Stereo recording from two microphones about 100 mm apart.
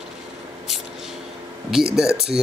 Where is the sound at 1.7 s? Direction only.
5° right (ahead or behind).